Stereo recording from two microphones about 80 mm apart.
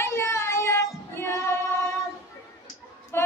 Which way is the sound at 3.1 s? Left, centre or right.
Left.